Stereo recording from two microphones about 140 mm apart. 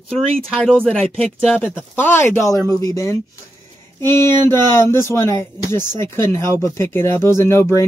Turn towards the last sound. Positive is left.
turn(degrees=20)  # may be behind; listen again after turning